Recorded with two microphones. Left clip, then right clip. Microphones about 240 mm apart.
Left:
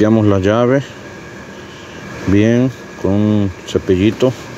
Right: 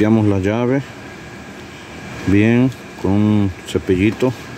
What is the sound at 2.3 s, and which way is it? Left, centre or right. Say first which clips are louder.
Speech: left 2 dB; right.